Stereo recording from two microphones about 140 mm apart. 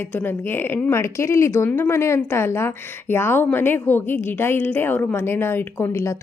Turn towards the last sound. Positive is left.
turn(degrees=20)  # may be behind; listen again after turning